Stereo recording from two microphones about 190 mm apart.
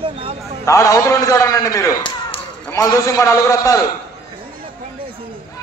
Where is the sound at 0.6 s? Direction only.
15° left (ahead or behind).